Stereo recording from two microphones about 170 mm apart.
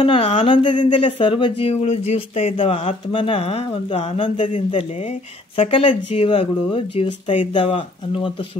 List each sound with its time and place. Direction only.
0.0 s speech: 30° left (ahead or behind)